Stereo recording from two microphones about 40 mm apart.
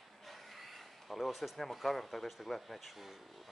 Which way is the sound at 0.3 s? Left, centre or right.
Centre.